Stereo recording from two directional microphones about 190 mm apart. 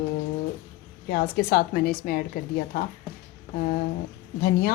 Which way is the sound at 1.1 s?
50° left (ahead or behind).